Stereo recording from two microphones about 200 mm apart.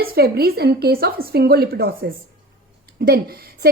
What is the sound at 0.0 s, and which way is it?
A woman's voice, 50° right (ahead or behind).